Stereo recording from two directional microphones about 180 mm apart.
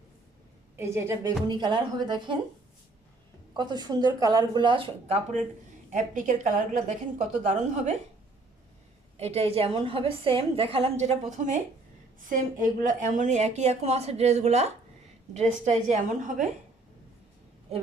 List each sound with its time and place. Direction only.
0.8 s a woman's voice: 15° right (ahead or behind)
1.5 s speech: 25° right (ahead or behind)
3.5 s a woman's voice: 25° right (ahead or behind); by 7.9 s 40° right (ahead or behind)
9.1 s a woman's voice: 35° right (ahead or behind)